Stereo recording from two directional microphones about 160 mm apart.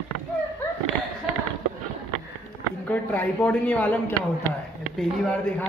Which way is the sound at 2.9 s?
10° left (ahead or behind).